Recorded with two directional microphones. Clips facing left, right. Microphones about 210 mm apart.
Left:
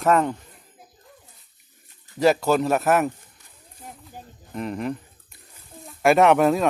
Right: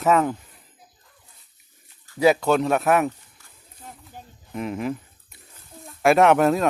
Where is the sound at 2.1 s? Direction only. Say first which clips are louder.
Right 1 dB; centre (ahead or behind).